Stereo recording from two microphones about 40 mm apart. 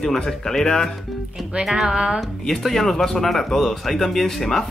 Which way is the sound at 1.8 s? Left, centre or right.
Right.